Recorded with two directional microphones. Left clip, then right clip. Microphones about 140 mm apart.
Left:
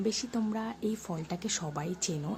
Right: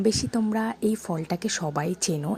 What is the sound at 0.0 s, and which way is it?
Speech, 40° right (ahead or behind).